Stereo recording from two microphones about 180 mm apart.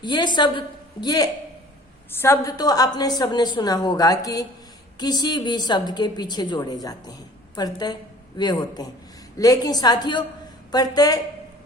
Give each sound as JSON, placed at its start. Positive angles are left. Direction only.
{"t": 0.0, "sound": "a woman's voice", "side_deg": 25}